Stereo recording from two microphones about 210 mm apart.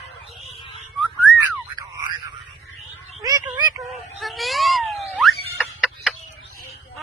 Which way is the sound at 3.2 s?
20° right (ahead or behind).